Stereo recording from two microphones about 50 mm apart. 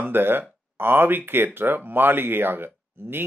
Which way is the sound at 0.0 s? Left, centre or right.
Right.